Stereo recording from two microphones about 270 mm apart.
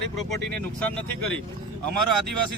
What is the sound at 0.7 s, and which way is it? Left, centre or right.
Speech, centre.